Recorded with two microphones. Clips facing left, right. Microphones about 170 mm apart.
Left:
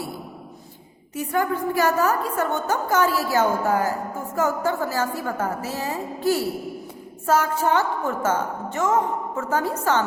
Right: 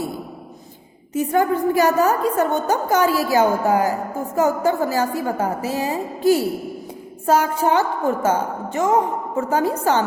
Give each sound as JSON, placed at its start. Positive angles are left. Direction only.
{"t": 1.1, "sound": "a woman's voice", "side_deg": -20}